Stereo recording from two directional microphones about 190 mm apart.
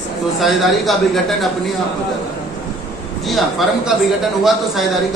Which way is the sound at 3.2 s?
Centre (ahead or behind).